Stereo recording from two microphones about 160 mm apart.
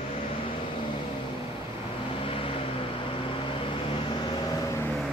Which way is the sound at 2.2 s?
35° left (ahead or behind).